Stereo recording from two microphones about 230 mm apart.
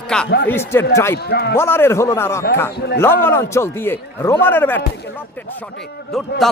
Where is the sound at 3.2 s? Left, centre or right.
Centre.